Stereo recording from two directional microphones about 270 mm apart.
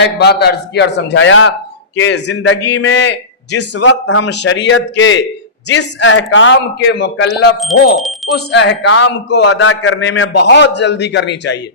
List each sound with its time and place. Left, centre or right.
0.0 s a man's voice: left
7.6 s speech: centre
8.5 s a man's voice: left